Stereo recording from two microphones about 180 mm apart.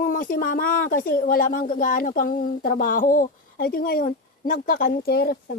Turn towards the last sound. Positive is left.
turn(degrees=60)  # may be behind; listen again after turning